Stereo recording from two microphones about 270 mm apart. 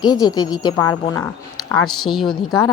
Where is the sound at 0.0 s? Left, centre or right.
Centre.